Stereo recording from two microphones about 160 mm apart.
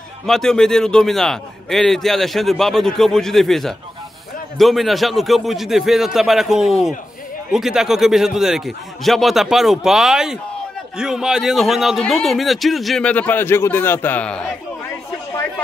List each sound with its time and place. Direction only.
0.3 s a man's voice: 5° left (ahead or behind)